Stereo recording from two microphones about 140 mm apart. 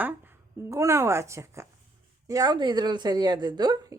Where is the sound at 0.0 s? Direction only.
15° right (ahead or behind).